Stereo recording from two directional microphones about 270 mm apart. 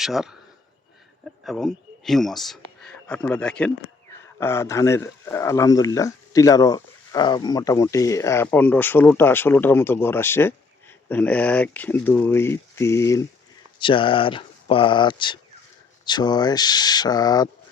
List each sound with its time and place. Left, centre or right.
0.0 s speech: centre
1.5 s speech: centre